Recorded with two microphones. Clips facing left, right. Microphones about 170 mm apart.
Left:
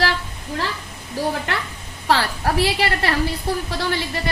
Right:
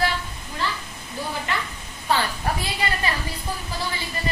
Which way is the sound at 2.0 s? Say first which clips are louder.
Left 4 dB; 90° left.